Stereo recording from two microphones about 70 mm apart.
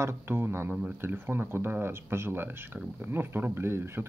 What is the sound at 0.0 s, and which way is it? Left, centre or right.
Speech, right.